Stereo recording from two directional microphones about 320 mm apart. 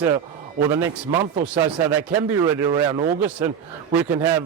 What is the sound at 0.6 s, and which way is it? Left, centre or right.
A man's voice, centre.